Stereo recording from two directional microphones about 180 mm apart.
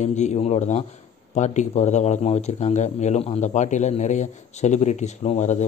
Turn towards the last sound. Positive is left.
turn(degrees=40)  # may be behind; listen again after turning